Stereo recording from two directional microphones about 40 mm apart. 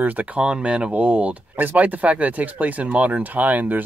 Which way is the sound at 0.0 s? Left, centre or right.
Right.